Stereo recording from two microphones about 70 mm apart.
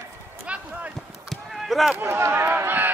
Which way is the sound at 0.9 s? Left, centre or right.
Centre.